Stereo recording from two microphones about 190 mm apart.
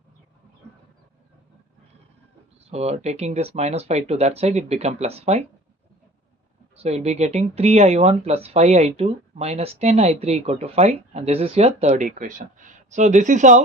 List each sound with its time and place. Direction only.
2.6 s speech: 35° right (ahead or behind)
6.7 s speech: 35° right (ahead or behind)